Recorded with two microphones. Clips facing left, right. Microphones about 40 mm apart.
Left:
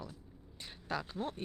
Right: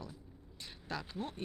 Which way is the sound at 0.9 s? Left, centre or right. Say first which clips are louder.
Left 3 dB; left.